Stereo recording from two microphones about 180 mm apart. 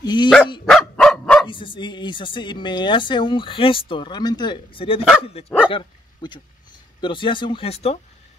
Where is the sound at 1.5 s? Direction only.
25° left (ahead or behind).